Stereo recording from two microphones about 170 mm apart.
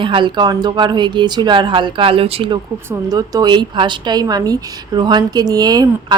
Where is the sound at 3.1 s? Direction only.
20° right (ahead or behind).